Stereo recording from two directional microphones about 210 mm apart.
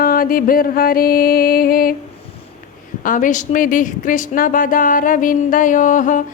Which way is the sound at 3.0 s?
40° left (ahead or behind).